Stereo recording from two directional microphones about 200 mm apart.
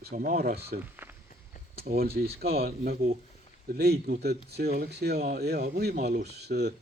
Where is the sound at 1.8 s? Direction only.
50° right (ahead or behind).